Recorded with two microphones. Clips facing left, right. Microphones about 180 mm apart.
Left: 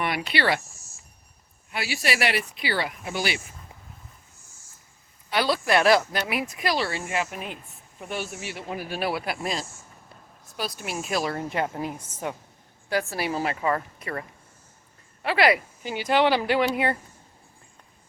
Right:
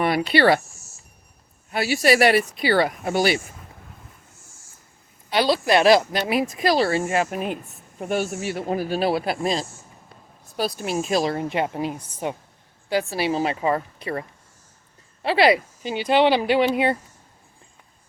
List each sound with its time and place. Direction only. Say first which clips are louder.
0.0 s speech: right 8 dB; 35° right (ahead or behind)
1.7 s speech: right 9 dB; 45° right (ahead or behind)
5.3 s a woman's voice: right 4 dB; 25° right (ahead or behind)
6.2 s a woman's voice: right 6 dB; 30° right (ahead or behind)